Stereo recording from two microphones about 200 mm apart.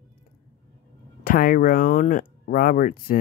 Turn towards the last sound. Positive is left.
turn(degrees=45)  # may be behind; listen again after turning